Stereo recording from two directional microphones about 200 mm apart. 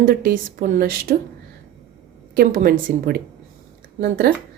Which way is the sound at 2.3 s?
45° right (ahead or behind).